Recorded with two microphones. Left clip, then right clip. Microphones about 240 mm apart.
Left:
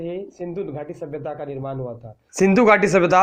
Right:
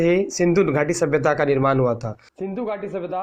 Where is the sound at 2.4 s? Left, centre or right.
Left.